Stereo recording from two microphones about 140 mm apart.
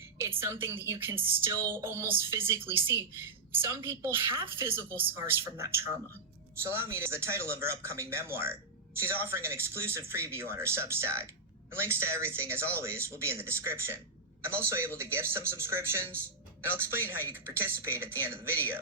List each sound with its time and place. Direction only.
0.2 s a woman's voice: 15° right (ahead or behind)